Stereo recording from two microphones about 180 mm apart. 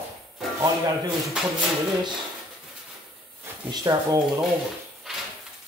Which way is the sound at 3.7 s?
20° right (ahead or behind).